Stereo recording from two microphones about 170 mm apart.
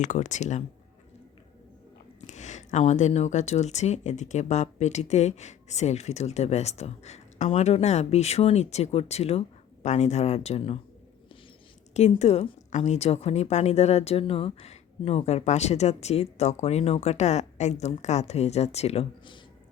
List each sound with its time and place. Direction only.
0.0 s speech: 45° left (ahead or behind)
2.2 s a woman's voice: 45° left (ahead or behind)
11.9 s a woman's voice: 40° left (ahead or behind)